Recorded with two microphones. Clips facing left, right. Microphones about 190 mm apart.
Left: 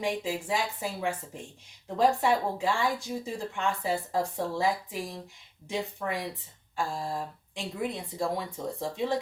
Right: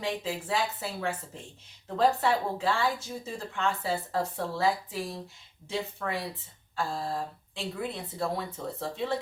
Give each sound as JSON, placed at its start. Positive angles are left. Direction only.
{"t": 0.0, "sound": "a woman's voice", "side_deg": 15}